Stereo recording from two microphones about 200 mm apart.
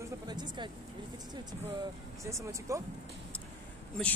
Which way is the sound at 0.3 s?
20° right (ahead or behind).